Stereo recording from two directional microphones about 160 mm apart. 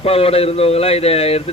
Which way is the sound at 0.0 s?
40° left (ahead or behind).